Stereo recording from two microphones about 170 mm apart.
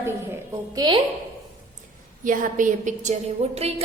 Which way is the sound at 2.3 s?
50° right (ahead or behind).